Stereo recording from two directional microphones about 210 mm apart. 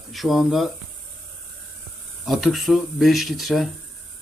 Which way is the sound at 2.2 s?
Centre (ahead or behind).